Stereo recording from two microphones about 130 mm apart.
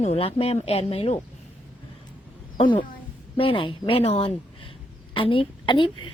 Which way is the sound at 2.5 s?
40° left (ahead or behind).